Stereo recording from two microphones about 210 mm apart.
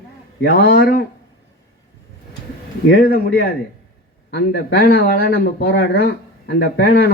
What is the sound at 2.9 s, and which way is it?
Speech, 45° left (ahead or behind).